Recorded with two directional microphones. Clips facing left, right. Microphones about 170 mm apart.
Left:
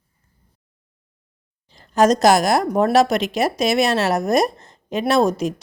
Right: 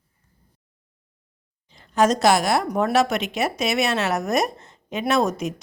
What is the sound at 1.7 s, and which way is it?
A woman's voice, 40° left (ahead or behind).